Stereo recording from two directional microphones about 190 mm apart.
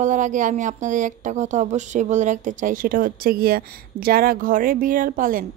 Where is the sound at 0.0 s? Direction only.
40° right (ahead or behind).